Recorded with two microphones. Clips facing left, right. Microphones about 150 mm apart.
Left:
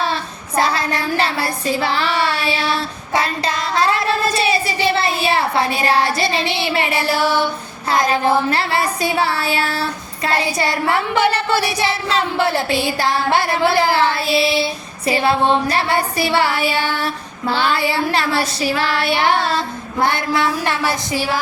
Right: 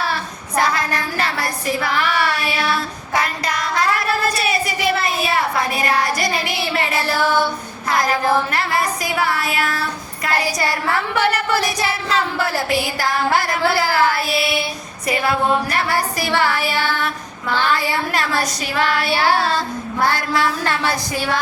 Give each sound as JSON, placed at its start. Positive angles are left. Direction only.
{"t": 0.0, "sound": "child singing", "side_deg": 25}
{"t": 11.3, "sound": "child singing", "side_deg": 30}
{"t": 16.3, "sound": "music", "side_deg": 15}
{"t": 17.5, "sound": "female singing", "side_deg": 30}
{"t": 20.0, "sound": "child singing", "side_deg": 20}